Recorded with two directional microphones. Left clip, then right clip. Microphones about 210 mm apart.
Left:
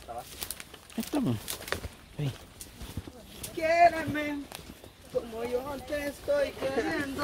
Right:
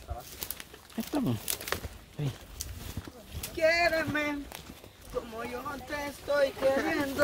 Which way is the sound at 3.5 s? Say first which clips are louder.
Left 3 dB; 15° right (ahead or behind).